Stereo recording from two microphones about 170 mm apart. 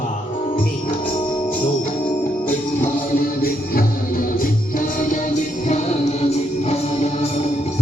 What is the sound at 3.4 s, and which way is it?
Music, 60° left (ahead or behind).